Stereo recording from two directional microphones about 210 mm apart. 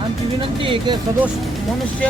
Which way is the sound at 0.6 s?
25° right (ahead or behind).